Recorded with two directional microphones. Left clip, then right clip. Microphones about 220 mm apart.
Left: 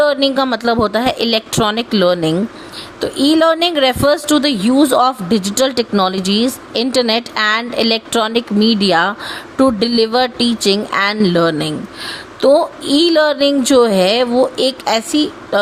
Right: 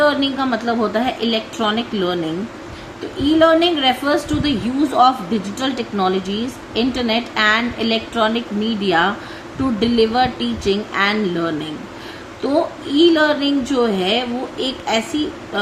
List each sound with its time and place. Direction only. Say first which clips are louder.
0.0 s a woman's voice: left 4 dB; 50° left (ahead or behind)
3.2 s a woman's voice: left 1 dB; 50° left (ahead or behind)